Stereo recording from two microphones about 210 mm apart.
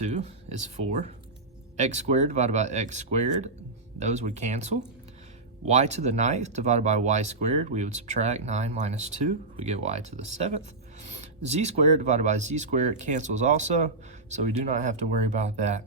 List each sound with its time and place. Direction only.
0.0 s speech: 30° right (ahead or behind)